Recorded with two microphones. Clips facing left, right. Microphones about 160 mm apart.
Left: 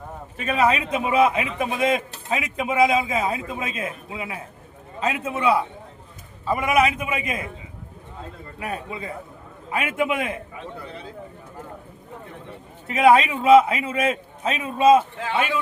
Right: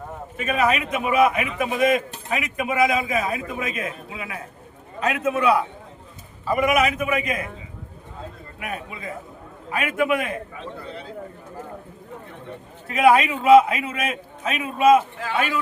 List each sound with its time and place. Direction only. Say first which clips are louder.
0.3 s a man's voice: left 1 dB; 30° left (ahead or behind)
8.5 s a man's voice: left 3 dB; 30° left (ahead or behind)
12.9 s a man's voice: left 1 dB; 25° left (ahead or behind)